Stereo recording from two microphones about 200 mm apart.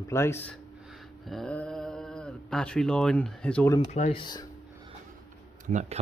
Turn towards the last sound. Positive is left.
turn(degrees=-35)  # may be behind; listen again after turning